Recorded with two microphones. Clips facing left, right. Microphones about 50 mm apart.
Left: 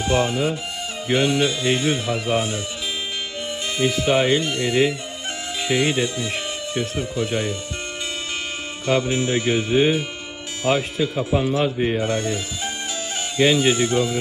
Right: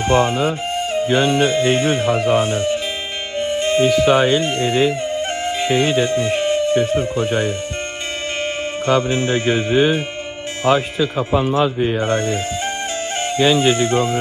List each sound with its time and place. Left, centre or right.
0.1 s music: right
3.3 s speech: right
7.0 s music: right
8.8 s music: right
13.4 s music: right